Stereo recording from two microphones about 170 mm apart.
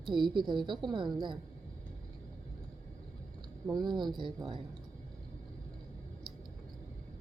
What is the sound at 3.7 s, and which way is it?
Speech, 25° right (ahead or behind).